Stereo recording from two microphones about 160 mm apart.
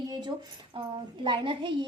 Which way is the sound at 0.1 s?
25° right (ahead or behind).